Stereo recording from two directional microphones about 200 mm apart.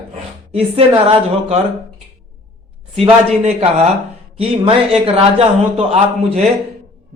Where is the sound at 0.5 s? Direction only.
30° right (ahead or behind).